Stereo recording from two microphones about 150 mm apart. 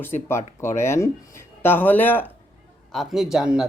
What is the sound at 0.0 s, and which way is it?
Speech, 15° left (ahead or behind).